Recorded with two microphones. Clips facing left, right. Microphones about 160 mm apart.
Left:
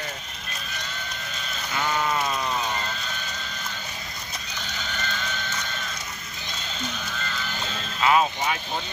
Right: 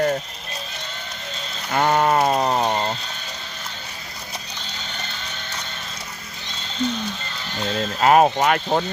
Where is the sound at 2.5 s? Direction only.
60° right (ahead or behind).